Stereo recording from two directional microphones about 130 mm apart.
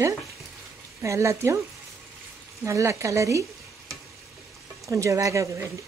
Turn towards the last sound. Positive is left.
turn(degrees=-25)  # may be behind; listen again after turning